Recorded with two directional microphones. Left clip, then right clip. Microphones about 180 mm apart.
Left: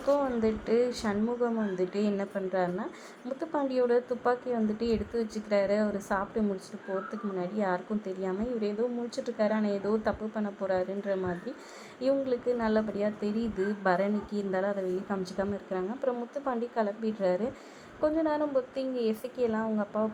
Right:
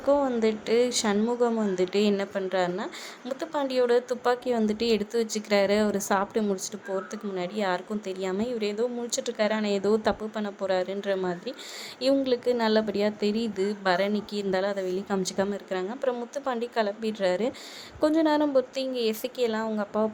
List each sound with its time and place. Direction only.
0.0 s a woman's voice: 25° right (ahead or behind)